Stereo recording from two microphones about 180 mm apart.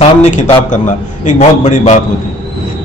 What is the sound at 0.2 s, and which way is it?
A man's voice, 40° left (ahead or behind).